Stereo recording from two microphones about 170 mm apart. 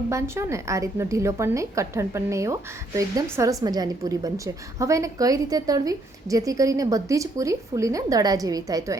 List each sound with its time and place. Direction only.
0.1 s a woman's voice: 15° right (ahead or behind)